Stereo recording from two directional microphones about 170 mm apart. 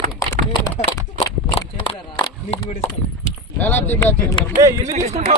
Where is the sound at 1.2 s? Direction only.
30° left (ahead or behind).